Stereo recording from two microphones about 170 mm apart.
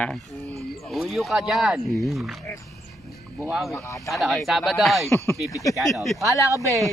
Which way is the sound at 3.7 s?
20° left (ahead or behind).